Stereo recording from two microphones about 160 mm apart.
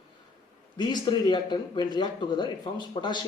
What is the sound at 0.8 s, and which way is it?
Speech, 30° left (ahead or behind).